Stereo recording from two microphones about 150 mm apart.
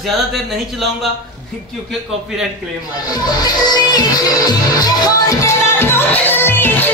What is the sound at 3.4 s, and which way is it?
Music, 25° left (ahead or behind).